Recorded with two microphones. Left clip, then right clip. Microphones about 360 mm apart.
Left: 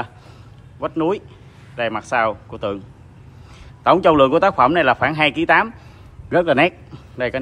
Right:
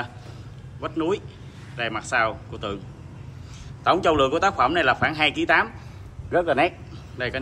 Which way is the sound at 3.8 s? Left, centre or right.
Centre.